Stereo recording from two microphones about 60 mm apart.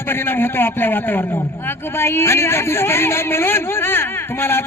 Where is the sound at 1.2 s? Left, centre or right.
Left.